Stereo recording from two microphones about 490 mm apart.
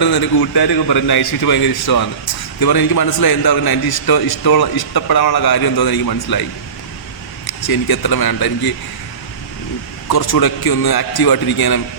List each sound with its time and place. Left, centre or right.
0.0 s a man's voice: left
7.4 s a man's voice: left
10.2 s a man's voice: left